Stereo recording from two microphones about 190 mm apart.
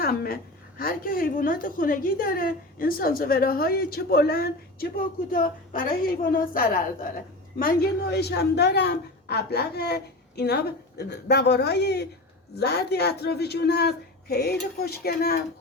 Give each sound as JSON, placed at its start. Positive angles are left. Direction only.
{"t": 0.0, "sound": "a woman's voice", "side_deg": 50}
{"t": 8.1, "sound": "a woman's voice", "side_deg": 60}